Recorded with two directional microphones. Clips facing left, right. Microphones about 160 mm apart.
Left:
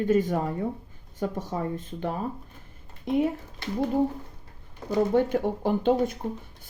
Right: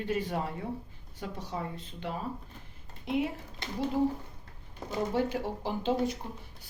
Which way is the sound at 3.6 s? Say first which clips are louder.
Left 8 dB; 20° right (ahead or behind).